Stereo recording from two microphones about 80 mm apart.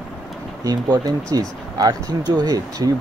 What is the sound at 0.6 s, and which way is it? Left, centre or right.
Speech, right.